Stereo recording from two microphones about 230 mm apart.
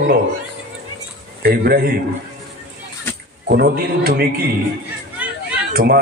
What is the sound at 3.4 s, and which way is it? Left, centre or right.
A man's voice, right.